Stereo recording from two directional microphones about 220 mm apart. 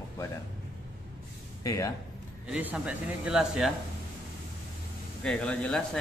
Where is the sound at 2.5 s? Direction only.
5° right (ahead or behind).